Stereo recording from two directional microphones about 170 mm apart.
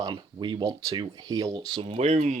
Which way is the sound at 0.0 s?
25° right (ahead or behind).